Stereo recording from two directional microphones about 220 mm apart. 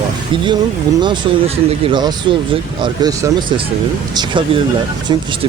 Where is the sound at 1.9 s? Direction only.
20° right (ahead or behind).